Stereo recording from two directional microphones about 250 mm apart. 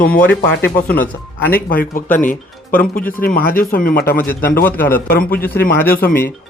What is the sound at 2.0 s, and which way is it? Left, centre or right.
Speech, centre.